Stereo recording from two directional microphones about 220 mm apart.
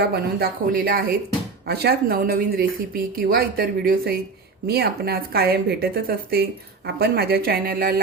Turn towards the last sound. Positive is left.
turn(degrees=-45)  # may be behind; listen again after turning